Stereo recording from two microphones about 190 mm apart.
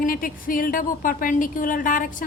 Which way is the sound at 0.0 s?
45° left (ahead or behind).